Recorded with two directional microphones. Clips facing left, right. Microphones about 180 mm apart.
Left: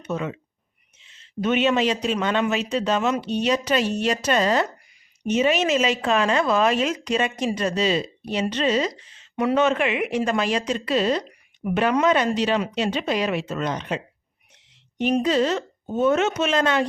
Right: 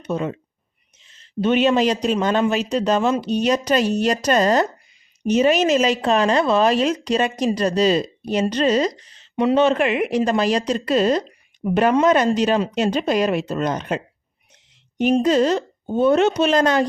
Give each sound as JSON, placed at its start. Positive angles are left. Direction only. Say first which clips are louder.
{"t": 0.0, "sound": "speech", "louder": "right 4 dB", "side_deg": -35}
{"t": 9.3, "sound": "speech", "louder": "right 4 dB", "side_deg": -25}
{"t": 11.2, "sound": "a sound", "louder": "right 4 dB", "side_deg": -30}
{"t": 12.0, "sound": "speech", "louder": "right 4 dB", "side_deg": -40}
{"t": 15.2, "sound": "speech", "louder": "right 4 dB", "side_deg": -40}